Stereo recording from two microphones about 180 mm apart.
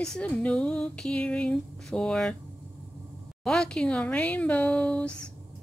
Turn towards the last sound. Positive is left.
turn(degrees=5)  # may be behind; listen again after turning